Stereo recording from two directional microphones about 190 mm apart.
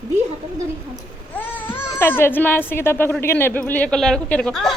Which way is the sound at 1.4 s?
10° left (ahead or behind).